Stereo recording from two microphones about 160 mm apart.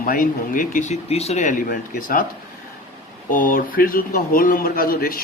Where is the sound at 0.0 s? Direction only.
60° left (ahead or behind).